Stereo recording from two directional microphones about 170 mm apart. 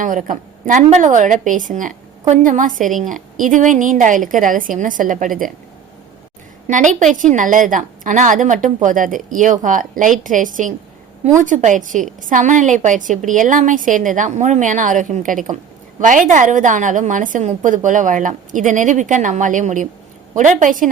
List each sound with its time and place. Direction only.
0.0 s a woman's voice: 50° right (ahead or behind)
6.7 s a woman's voice: 45° right (ahead or behind)